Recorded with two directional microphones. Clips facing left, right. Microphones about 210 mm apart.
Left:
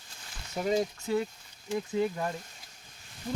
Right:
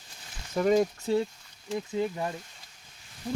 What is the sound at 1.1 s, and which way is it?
Speech, 30° right (ahead or behind).